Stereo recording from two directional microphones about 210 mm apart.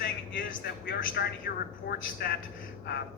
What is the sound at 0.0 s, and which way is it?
Vehicle, 45° left (ahead or behind).